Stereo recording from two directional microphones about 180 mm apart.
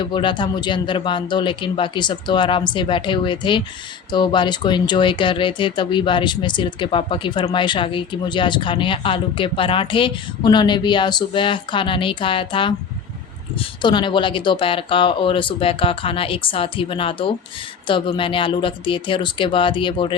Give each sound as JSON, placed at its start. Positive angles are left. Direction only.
{"t": 0.0, "sound": "speech", "side_deg": 25}
{"t": 13.8, "sound": "speech", "side_deg": 25}